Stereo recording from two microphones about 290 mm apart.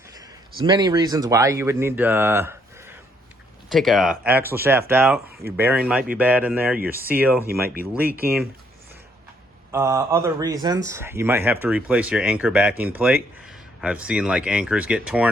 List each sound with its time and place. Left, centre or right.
0.1 s speech: centre
9.7 s speech: centre